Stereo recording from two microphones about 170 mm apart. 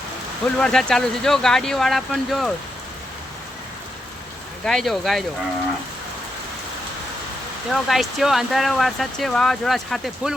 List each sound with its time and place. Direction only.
0.6 s speech: 5° left (ahead or behind)
4.6 s speech: centre (ahead or behind)
7.7 s speech: centre (ahead or behind)